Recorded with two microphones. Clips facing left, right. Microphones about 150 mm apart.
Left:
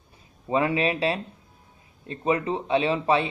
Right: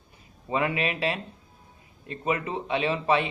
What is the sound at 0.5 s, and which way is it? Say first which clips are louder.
Speech: left 4 dB; 25° left (ahead or behind).